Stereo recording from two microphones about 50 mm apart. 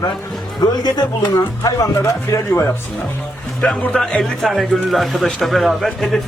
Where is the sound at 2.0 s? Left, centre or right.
Left.